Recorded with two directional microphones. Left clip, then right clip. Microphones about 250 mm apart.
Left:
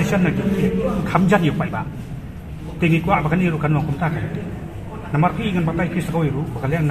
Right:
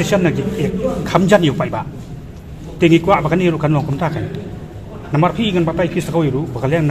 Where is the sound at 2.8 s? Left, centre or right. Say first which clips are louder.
Right 7 dB; right.